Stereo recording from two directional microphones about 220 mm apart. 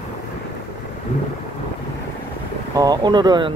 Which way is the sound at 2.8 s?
20° right (ahead or behind).